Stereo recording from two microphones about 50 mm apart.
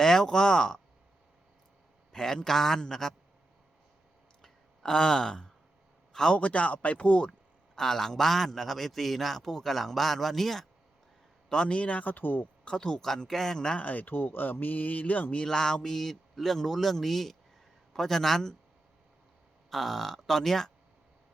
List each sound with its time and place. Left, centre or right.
0.0 s speech: centre
2.1 s speech: centre
4.4 s a sound: centre
6.1 s speech: centre
7.8 s a man's voice: centre
11.5 s speech: left
12.6 s speech: centre
13.7 s speech: left
14.1 s speech: left
15.4 s a man's voice: centre
19.7 s a man's voice: centre